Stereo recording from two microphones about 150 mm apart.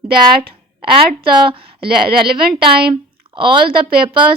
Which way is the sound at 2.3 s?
90° right.